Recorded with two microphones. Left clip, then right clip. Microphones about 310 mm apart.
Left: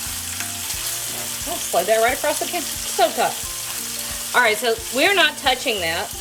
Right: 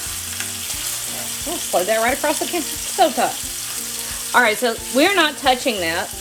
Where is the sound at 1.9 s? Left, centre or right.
Centre.